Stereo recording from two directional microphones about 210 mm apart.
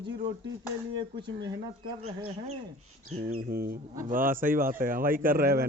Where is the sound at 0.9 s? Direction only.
20° right (ahead or behind).